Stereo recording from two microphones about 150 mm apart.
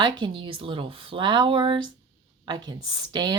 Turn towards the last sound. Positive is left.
turn(degrees=-25)  # may be behind; listen again after turning